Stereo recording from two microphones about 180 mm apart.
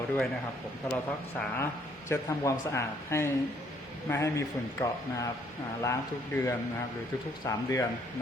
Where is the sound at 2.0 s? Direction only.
15° left (ahead or behind).